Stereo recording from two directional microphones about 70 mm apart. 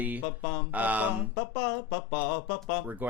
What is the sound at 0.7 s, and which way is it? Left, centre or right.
Speech, right.